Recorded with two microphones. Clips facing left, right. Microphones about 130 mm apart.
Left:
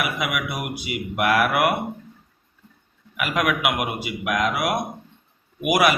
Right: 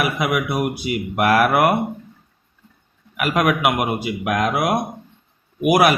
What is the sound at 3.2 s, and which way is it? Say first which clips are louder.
Speech: right 4 dB; 40° right (ahead or behind).